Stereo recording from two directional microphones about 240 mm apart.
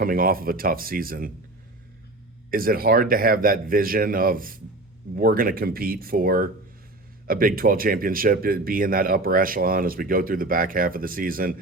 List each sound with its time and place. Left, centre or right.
0.0 s speech: right
2.5 s speech: right